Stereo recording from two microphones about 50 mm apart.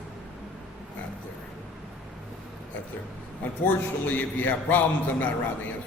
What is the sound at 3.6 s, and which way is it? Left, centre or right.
A man's voice, left.